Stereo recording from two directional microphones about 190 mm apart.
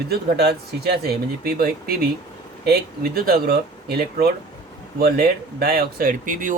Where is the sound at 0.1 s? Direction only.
60° right (ahead or behind).